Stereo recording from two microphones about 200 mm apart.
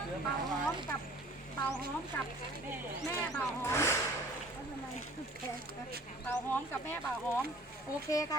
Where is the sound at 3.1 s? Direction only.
10° left (ahead or behind).